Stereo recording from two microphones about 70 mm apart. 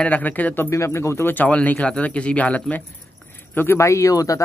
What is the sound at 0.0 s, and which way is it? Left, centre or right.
Speech, left.